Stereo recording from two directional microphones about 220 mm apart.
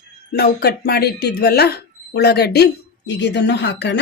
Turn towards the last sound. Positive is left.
turn(degrees=55)  # may be behind; listen again after turning